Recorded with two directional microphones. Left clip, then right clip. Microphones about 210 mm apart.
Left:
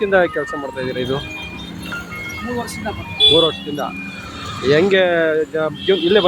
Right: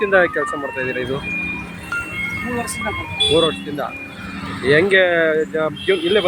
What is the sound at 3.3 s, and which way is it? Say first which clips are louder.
Speech: left 2 dB; 5° left (ahead or behind).